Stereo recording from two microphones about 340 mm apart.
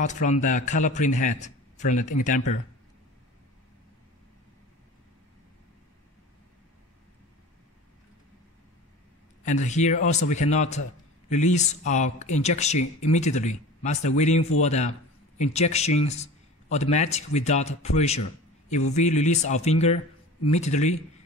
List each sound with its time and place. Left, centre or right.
0.0 s speech: left
9.4 s speech: left